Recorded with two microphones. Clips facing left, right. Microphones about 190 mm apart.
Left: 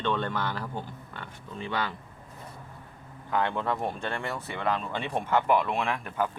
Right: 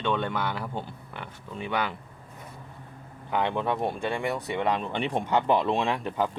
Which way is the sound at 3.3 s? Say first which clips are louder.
Right 1 dB; 15° right (ahead or behind).